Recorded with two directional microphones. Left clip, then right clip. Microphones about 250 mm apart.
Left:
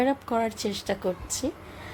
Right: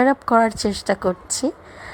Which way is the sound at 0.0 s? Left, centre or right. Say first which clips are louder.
Right 9 dB; right.